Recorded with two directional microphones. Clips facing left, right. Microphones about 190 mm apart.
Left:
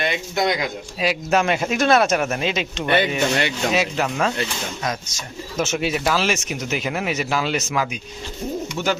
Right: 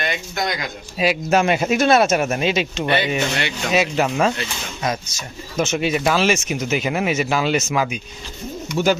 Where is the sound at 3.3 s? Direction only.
40° left (ahead or behind).